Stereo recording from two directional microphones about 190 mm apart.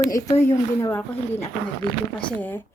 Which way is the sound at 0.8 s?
15° left (ahead or behind).